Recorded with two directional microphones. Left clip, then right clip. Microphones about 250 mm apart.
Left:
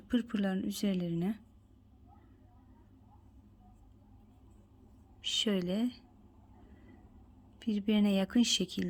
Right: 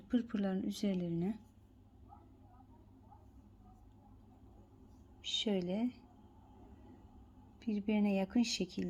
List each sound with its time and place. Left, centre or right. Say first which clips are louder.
0.1 s a woman's voice: left 3 dB; centre
5.2 s a woman's voice: left 4 dB; centre
7.6 s speech: left 4 dB; left